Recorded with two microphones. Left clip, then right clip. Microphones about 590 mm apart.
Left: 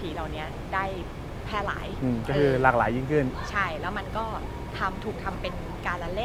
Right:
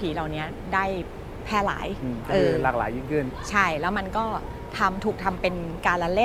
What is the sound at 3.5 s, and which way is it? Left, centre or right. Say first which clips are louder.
A woman's voice: right 10 dB; right.